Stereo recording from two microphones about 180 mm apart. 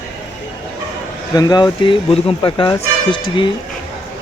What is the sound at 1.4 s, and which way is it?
Speech, 20° left (ahead or behind).